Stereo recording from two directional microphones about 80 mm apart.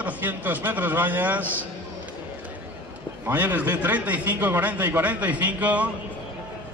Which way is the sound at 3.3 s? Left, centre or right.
Right.